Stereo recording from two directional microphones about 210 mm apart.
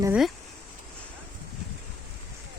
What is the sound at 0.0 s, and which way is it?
Speech, 5° right (ahead or behind).